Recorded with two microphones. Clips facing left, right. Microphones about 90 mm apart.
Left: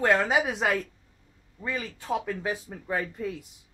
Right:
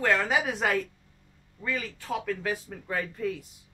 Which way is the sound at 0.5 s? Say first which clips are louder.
Even; 10° left (ahead or behind).